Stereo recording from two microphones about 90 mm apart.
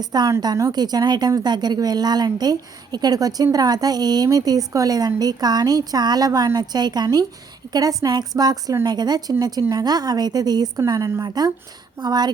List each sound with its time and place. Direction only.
0.0 s a woman's voice: 50° right (ahead or behind)